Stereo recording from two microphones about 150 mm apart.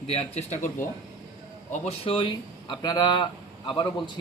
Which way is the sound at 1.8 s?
35° left (ahead or behind).